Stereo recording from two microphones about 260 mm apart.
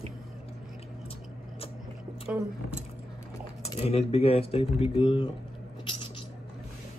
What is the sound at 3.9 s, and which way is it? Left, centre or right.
Speech, left.